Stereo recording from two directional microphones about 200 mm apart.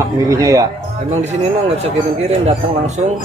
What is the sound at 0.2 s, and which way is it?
Speech, 15° right (ahead or behind).